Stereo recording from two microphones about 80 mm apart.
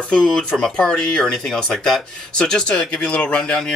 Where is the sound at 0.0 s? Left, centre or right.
Centre.